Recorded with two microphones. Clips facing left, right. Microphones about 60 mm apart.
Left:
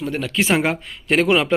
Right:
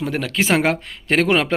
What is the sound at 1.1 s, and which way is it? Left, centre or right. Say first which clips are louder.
Speech: even; right.